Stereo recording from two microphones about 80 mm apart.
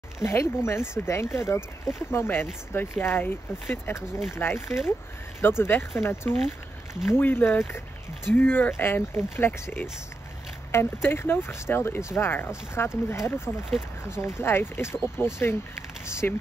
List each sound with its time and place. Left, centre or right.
0.2 s speech: left